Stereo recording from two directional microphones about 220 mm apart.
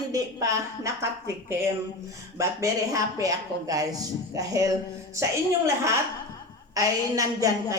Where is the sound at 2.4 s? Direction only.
15° right (ahead or behind).